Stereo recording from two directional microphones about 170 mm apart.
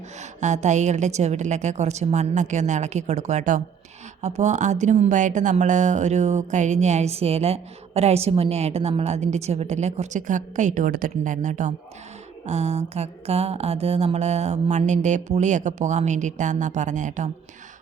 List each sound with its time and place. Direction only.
0.2 s speech: 45° right (ahead or behind)
12.5 s mantra: 40° right (ahead or behind)